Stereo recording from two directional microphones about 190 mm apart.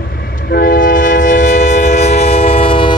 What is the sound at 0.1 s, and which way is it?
Train, 55° left (ahead or behind).